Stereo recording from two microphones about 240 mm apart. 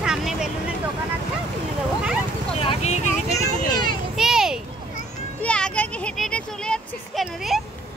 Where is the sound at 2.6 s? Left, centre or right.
Left.